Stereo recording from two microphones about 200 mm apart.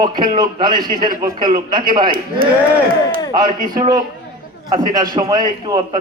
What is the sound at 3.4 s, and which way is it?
A man's voice, 20° right (ahead or behind).